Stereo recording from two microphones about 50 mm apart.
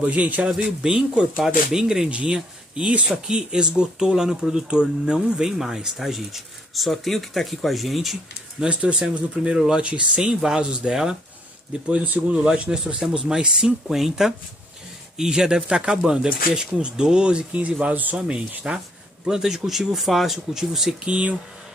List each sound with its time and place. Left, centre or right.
0.0 s speech: right
0.5 s speech: centre
2.0 s speech: right; by 8.2 s centre
8.6 s speech: centre
11.7 s speech: right
18.1 s speech: centre
21.0 s speech: right